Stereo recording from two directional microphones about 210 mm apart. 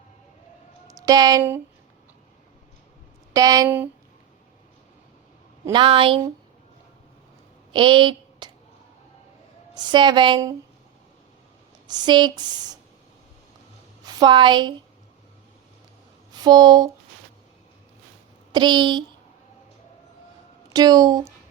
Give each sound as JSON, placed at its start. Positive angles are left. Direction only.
{"t": 0.9, "sound": "speech", "side_deg": -15}
{"t": 3.3, "sound": "speech", "side_deg": -15}
{"t": 5.6, "sound": "speech", "side_deg": -25}
{"t": 7.7, "sound": "speech", "side_deg": -25}
{"t": 9.7, "sound": "speech", "side_deg": -20}
{"t": 11.9, "sound": "speech", "side_deg": -20}
{"t": 14.1, "sound": "speech", "side_deg": -20}
{"t": 16.3, "sound": "speech", "side_deg": -20}
{"t": 18.5, "sound": "speech", "side_deg": -20}
{"t": 20.7, "sound": "speech", "side_deg": -20}